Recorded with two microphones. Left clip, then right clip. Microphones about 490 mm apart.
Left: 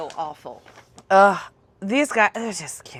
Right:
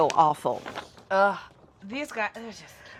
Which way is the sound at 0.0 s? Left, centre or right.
Right.